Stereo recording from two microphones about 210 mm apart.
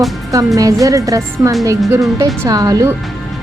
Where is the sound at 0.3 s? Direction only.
15° right (ahead or behind).